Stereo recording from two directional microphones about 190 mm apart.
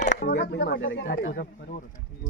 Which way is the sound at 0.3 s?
65° left (ahead or behind).